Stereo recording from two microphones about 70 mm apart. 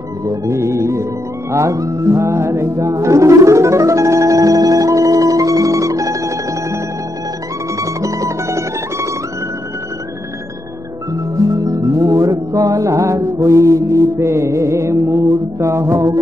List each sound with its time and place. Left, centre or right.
0.3 s music: right
7.8 s music: right
11.6 s music: right